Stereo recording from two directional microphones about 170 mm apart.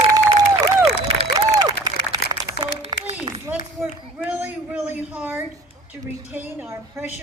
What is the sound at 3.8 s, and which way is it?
A woman's voice, 10° right (ahead or behind).